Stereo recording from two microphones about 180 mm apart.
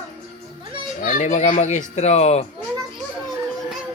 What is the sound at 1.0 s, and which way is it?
Speech, 45° left (ahead or behind).